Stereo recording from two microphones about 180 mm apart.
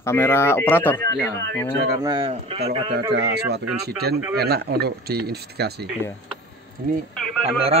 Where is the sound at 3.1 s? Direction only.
70° right (ahead or behind).